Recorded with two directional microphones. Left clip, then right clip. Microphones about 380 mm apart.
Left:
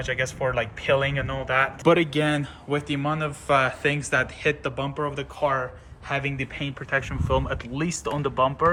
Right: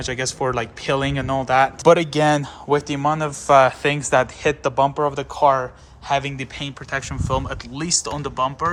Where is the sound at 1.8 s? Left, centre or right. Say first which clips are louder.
Right 5 dB; centre.